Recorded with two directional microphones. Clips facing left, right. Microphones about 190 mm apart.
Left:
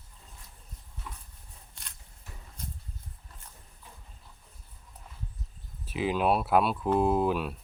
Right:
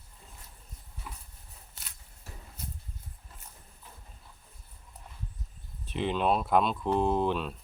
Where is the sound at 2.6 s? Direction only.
5° right (ahead or behind).